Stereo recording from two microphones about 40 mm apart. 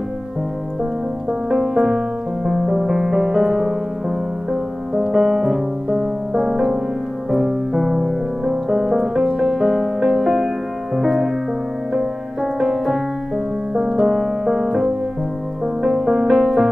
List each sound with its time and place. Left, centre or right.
1.5 s music: centre
12.5 s music: centre